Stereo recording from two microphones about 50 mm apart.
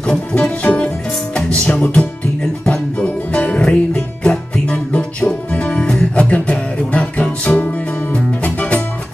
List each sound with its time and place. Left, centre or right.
0.0 s music: centre